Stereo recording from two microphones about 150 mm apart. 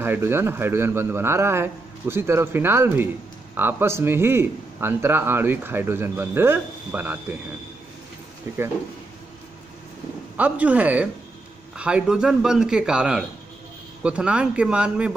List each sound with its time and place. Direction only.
0.0 s a man's voice: 15° right (ahead or behind)
10.3 s a man's voice: 10° right (ahead or behind)